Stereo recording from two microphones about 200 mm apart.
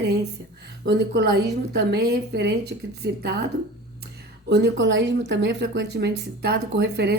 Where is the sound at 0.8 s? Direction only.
55° right (ahead or behind).